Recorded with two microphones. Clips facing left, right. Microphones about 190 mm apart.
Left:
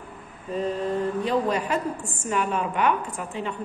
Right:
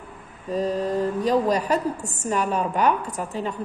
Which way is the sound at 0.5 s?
40° right (ahead or behind).